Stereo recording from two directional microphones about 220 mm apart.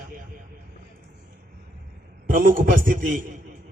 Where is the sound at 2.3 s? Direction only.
40° right (ahead or behind).